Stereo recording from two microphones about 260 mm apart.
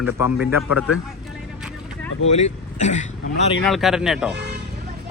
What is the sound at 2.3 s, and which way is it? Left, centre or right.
Speech, left.